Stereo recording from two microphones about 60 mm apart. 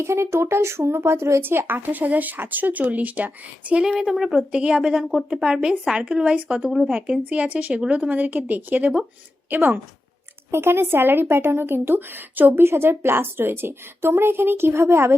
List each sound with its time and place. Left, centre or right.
0.0 s speech: right
3.8 s speech: centre
4.5 s speech: centre
6.9 s speech: right
10.5 s speech: right